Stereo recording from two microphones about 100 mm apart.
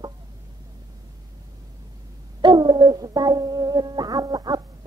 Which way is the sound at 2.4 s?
45° right (ahead or behind).